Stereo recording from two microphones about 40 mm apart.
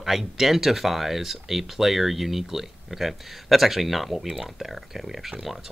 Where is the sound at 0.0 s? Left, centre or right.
Centre.